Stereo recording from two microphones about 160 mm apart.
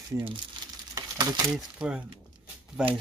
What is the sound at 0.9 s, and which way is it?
Stir, 25° right (ahead or behind).